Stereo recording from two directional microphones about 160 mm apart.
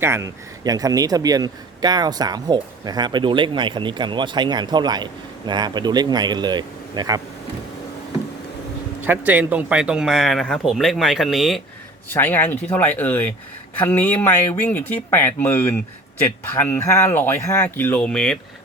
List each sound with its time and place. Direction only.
0.0 s a man's voice: 15° right (ahead or behind)
9.0 s speech: 10° right (ahead or behind)
12.0 s speech: 15° left (ahead or behind)